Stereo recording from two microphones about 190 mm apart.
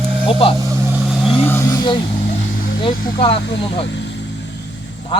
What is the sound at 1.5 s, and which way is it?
Vehicle, 15° left (ahead or behind).